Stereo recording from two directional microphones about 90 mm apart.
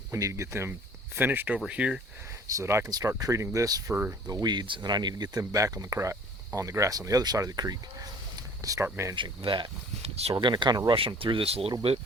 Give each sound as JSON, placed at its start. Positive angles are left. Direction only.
{"t": 0.1, "sound": "speech", "side_deg": -35}
{"t": 1.1, "sound": "speech", "side_deg": -20}
{"t": 1.5, "sound": "speech", "side_deg": -10}
{"t": 2.6, "sound": "speech", "side_deg": -30}
{"t": 8.4, "sound": "a sound", "side_deg": -40}
{"t": 8.8, "sound": "speech", "side_deg": -30}
{"t": 9.1, "sound": "speech", "side_deg": -65}
{"t": 10.9, "sound": "speech", "side_deg": -80}